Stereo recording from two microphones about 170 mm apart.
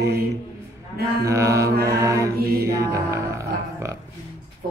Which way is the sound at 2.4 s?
65° right (ahead or behind).